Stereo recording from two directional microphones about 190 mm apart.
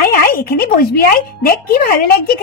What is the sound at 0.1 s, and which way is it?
A woman's voice, 50° left (ahead or behind).